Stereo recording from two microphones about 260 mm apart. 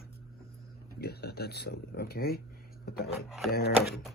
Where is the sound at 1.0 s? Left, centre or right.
Left.